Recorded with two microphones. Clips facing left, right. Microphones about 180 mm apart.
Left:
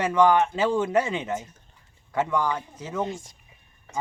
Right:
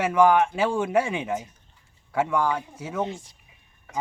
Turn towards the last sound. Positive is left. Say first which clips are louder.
# left 2 dB
turn(degrees=45)  # may be behind; listen again after turning